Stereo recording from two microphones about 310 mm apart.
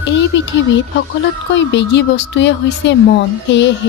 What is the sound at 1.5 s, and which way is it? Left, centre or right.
Speech, left.